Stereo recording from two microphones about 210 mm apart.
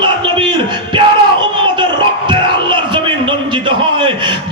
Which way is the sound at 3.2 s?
25° right (ahead or behind).